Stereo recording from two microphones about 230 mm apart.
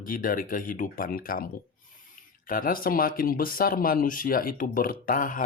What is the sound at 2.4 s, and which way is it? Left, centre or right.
Speech, left.